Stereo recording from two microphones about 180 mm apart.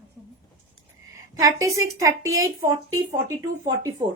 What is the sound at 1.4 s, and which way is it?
A woman's voice, 20° right (ahead or behind).